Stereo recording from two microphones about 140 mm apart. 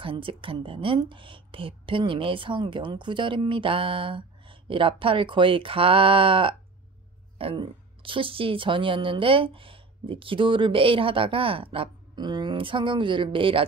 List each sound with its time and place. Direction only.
0.0 s a woman's voice: 40° right (ahead or behind)